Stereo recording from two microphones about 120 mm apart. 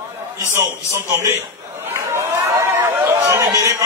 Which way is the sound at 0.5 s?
20° right (ahead or behind).